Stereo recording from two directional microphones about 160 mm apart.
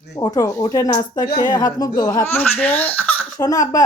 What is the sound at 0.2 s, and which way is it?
Speech, 20° left (ahead or behind).